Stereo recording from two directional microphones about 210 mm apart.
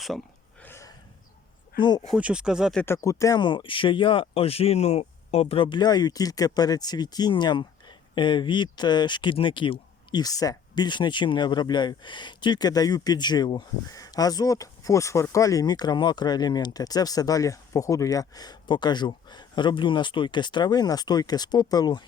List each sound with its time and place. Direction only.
0.6 s a sound: 15° left (ahead or behind)
2.0 s speech: 5° right (ahead or behind)
2.8 s speech: 15° left (ahead or behind)